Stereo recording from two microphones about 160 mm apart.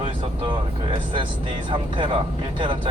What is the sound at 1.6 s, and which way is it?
Speech, 30° right (ahead or behind).